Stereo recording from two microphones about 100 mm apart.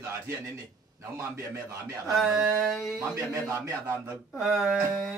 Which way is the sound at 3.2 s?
30° right (ahead or behind).